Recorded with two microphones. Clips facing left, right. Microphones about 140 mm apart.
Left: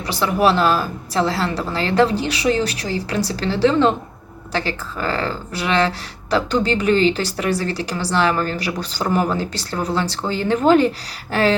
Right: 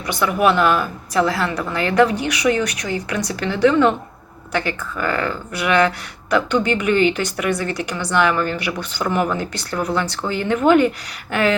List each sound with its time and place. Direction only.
0.1 s a woman's voice: 30° left (ahead or behind)